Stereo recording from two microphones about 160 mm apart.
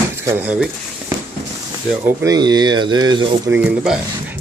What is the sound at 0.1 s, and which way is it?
Speech, 15° right (ahead or behind).